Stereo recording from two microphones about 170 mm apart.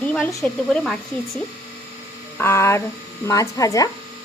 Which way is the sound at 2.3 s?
15° left (ahead or behind).